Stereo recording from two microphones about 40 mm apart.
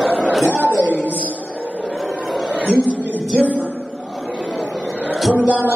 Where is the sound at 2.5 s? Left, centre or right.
Right.